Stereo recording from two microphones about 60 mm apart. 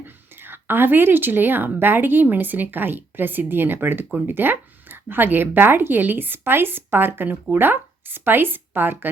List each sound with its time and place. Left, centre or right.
0.0 s speech: right